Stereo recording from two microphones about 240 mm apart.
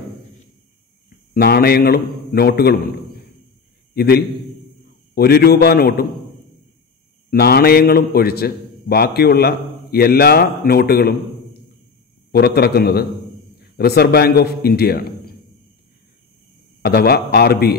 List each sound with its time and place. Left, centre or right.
1.3 s a man's voice: left
3.9 s a man's voice: left
7.2 s a man's voice: left
12.3 s a man's voice: left
16.8 s a man's voice: left